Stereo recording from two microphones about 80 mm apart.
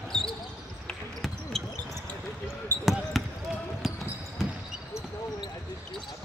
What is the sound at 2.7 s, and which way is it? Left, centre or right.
Basketball bounce, right.